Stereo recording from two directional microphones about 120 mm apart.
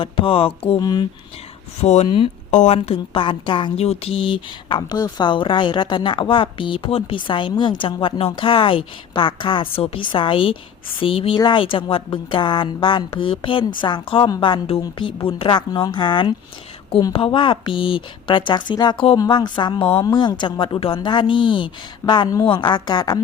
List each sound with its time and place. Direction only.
0.0 s speech: 50° left (ahead or behind)
0.8 s a woman's voice: 35° left (ahead or behind)
1.8 s speech: 65° left (ahead or behind)
2.0 s speech: 45° left (ahead or behind)
2.5 s a woman's voice: 80° left
2.7 s a woman's voice: 50° left (ahead or behind)